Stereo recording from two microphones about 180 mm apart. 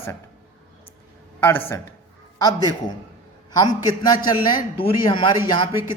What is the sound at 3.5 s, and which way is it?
A man's voice, 20° left (ahead or behind).